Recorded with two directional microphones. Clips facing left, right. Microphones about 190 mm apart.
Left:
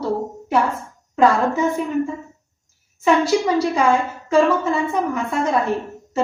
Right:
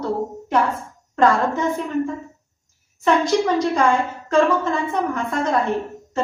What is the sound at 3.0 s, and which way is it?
A woman's voice, 10° left (ahead or behind).